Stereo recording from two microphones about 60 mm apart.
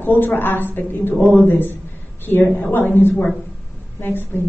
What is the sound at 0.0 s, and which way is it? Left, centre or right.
Speech, left.